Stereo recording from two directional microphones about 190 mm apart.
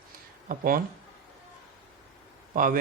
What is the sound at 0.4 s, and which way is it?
Speech, 50° right (ahead or behind).